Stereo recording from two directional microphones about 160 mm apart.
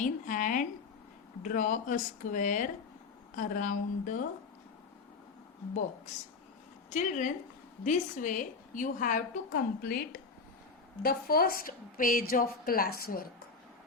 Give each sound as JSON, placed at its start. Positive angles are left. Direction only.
{"t": 0.0, "sound": "a woman's voice", "side_deg": 55}
{"t": 6.9, "sound": "a woman's voice", "side_deg": 50}